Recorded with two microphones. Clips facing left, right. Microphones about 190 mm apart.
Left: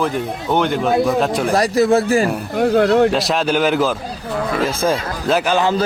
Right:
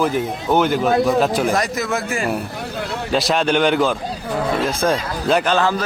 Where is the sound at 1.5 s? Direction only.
35° left (ahead or behind).